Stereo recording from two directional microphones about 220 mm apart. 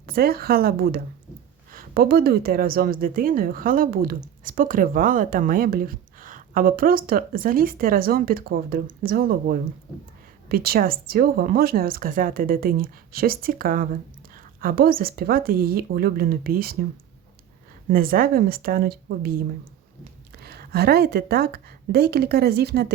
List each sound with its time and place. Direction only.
0.0 s a woman's voice: 45° right (ahead or behind)
17.8 s a woman's voice: 40° right (ahead or behind)
20.4 s a woman's voice: 45° right (ahead or behind)